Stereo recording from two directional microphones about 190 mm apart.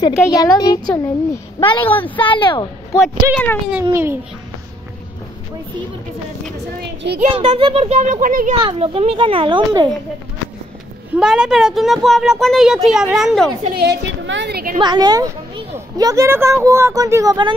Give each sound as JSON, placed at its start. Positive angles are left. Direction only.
{"t": 0.0, "sound": "a woman's voice", "side_deg": 20}
{"t": 1.8, "sound": "speech", "side_deg": 10}
{"t": 2.1, "sound": "a woman's voice", "side_deg": 25}
{"t": 3.3, "sound": "a woman's voice", "side_deg": 5}
{"t": 3.9, "sound": "speech", "side_deg": -10}
{"t": 6.8, "sound": "a sound", "side_deg": -65}
{"t": 7.2, "sound": "a child's voice", "side_deg": -30}
{"t": 8.5, "sound": "a child's voice", "side_deg": -30}
{"t": 11.1, "sound": "a woman's voice", "side_deg": -5}
{"t": 13.7, "sound": "a woman's voice", "side_deg": -65}
{"t": 14.8, "sound": "speech", "side_deg": -20}